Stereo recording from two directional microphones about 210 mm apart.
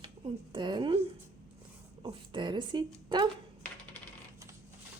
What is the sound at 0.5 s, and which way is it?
A woman's voice, 20° right (ahead or behind).